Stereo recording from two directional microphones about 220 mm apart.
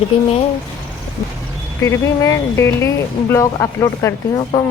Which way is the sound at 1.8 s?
15° left (ahead or behind).